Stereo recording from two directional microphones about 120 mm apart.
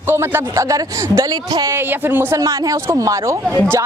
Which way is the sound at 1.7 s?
20° right (ahead or behind).